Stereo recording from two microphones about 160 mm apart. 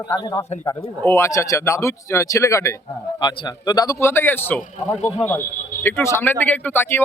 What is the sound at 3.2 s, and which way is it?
Speech, 30° left (ahead or behind).